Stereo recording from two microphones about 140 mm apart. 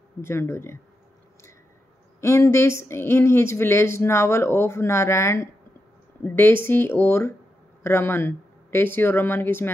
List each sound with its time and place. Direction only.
0.2 s speech: 20° left (ahead or behind)
2.1 s speech: 20° left (ahead or behind)